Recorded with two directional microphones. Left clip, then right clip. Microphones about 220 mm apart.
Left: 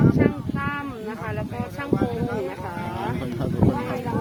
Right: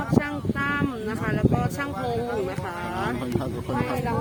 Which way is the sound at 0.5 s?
35° right (ahead or behind).